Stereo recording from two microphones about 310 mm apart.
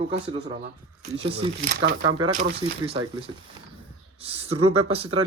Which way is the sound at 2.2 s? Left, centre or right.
Right.